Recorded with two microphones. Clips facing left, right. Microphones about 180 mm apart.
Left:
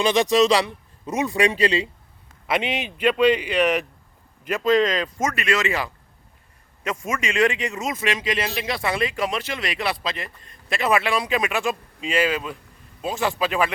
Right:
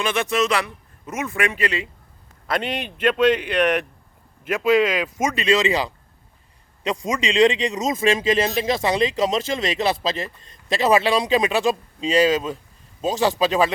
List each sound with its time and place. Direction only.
0.0 s speech: 35° left (ahead or behind)
2.5 s speech: 5° left (ahead or behind)
4.4 s speech: 5° right (ahead or behind)
5.3 s speech: 20° right (ahead or behind)
7.0 s speech: 15° right (ahead or behind); by 12.5 s 30° right (ahead or behind)